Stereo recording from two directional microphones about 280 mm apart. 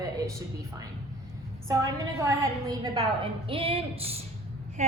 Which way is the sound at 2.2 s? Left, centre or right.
Centre.